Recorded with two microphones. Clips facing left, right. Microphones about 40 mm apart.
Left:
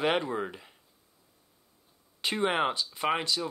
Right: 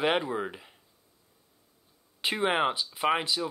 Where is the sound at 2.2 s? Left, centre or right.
Centre.